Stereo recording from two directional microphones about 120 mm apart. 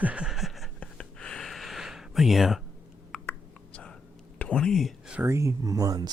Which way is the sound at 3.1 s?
10° left (ahead or behind).